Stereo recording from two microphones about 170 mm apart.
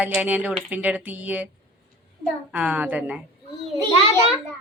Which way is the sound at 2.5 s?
10° right (ahead or behind).